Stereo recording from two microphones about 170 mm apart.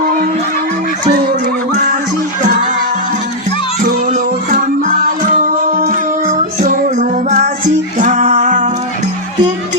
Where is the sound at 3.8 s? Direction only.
50° right (ahead or behind).